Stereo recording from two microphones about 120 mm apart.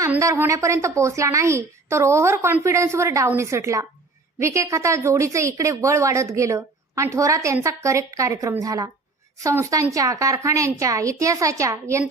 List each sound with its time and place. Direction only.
0.2 s a woman's voice: 25° right (ahead or behind)